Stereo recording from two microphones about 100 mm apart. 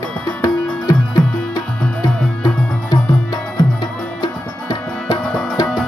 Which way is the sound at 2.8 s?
40° left (ahead or behind).